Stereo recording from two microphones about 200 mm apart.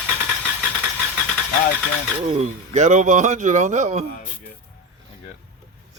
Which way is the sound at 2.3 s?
35° right (ahead or behind).